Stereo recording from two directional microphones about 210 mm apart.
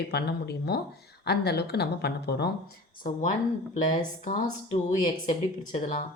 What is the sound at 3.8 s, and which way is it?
A woman's voice, 35° left (ahead or behind).